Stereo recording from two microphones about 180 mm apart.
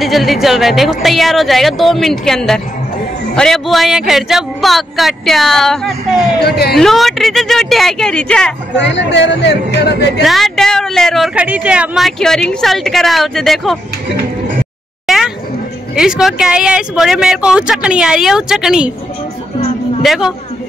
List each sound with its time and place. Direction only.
0.0 s speech: centre (ahead or behind)
8.7 s speech: 75° left (ahead or behind)
10.2 s speech: centre (ahead or behind)
15.0 s a sound: centre (ahead or behind)
16.0 s speech: 5° right (ahead or behind)
20.0 s speech: centre (ahead or behind)